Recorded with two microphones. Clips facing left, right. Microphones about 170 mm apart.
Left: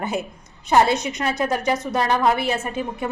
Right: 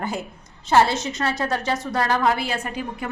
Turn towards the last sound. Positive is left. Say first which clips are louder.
# left 3 dB
turn(degrees=25)  # may be behind; listen again after turning